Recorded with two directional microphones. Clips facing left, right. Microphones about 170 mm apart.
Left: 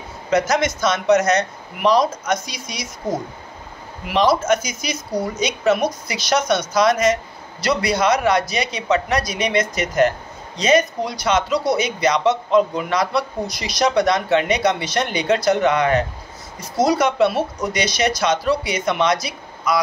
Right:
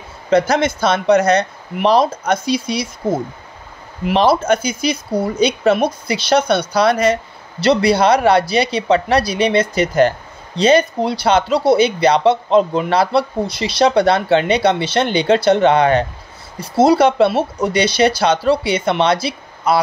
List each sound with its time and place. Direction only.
0.3 s speech: 30° right (ahead or behind)